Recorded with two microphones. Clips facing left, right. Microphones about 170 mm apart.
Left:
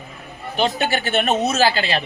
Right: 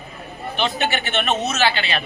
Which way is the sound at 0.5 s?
40° left (ahead or behind).